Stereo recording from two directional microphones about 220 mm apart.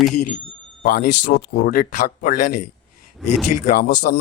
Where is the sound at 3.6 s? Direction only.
45° left (ahead or behind).